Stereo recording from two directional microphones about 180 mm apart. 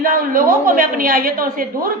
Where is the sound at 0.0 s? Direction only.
50° right (ahead or behind).